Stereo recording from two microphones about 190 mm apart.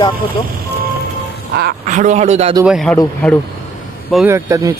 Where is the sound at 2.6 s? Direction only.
Centre (ahead or behind).